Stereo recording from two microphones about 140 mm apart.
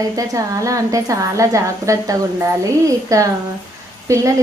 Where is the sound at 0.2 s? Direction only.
25° right (ahead or behind).